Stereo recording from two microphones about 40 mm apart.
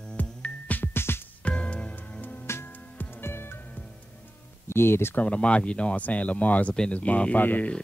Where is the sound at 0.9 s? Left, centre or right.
Left.